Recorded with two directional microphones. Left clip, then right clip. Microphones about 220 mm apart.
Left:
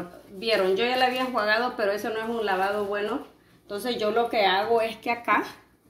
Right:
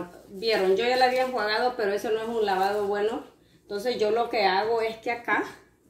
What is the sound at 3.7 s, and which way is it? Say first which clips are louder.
Speech: right 2 dB; 30° left (ahead or behind).